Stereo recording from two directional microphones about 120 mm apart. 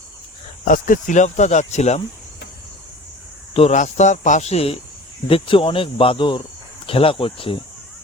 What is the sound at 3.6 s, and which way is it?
Speech, 75° left (ahead or behind).